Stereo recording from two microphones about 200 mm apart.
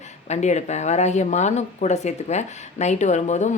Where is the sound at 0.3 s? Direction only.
35° left (ahead or behind).